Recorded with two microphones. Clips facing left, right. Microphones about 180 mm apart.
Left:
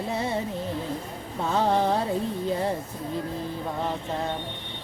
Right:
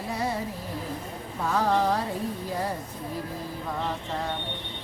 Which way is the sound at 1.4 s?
25° left (ahead or behind).